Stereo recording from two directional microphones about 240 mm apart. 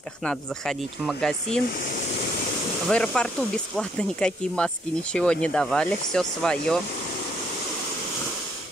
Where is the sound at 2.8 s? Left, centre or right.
Centre.